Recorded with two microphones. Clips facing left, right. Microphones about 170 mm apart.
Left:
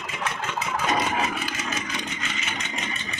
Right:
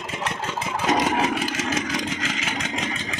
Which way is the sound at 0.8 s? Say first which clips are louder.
Right 5 dB; 80° right.